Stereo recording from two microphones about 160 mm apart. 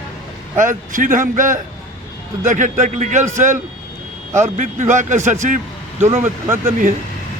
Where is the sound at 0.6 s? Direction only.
55° right (ahead or behind).